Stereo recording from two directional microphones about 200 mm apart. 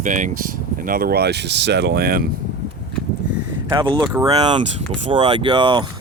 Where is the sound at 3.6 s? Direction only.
20° right (ahead or behind).